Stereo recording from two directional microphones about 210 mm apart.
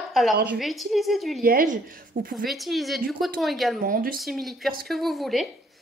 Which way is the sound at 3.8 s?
40° right (ahead or behind).